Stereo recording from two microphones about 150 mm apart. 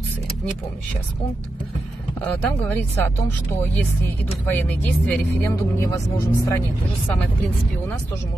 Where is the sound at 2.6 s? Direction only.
10° left (ahead or behind).